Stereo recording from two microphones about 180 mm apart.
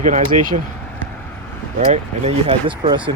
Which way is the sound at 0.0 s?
45° right (ahead or behind).